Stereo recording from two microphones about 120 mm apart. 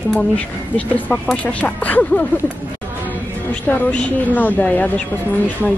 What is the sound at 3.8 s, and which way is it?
Speech, 10° left (ahead or behind).